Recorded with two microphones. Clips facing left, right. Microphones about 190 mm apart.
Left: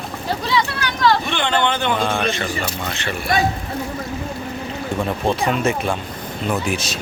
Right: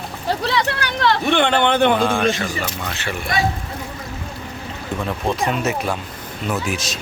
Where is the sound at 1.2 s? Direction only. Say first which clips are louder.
Right 4 dB; 55° right (ahead or behind).